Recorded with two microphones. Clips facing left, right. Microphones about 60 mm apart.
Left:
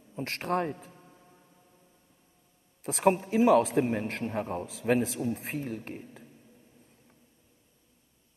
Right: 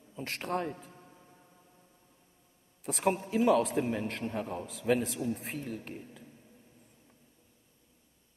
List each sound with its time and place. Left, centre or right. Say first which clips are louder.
0.1 s a man's voice: left 4 dB; left
2.8 s a man's voice: left 5 dB; left
3.8 s a man's voice: left 3 dB; left
4.8 s a man's voice: left 2 dB; left